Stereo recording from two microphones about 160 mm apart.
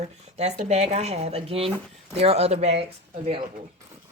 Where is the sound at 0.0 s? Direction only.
45° right (ahead or behind).